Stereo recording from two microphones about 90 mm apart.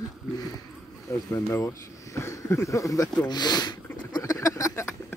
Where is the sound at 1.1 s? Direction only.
35° left (ahead or behind).